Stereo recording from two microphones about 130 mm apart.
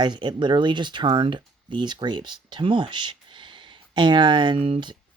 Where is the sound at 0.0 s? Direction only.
35° right (ahead or behind).